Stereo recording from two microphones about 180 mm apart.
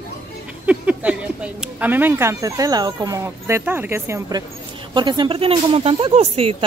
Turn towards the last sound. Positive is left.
turn(degrees=-35)  # may be behind; listen again after turning